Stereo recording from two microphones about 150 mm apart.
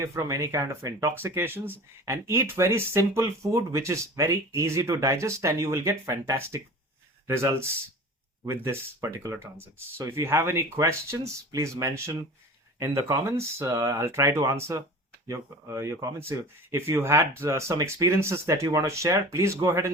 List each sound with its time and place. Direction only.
0.0 s speech: 20° right (ahead or behind)